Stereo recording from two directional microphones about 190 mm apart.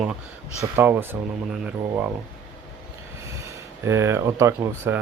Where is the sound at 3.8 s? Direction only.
15° right (ahead or behind).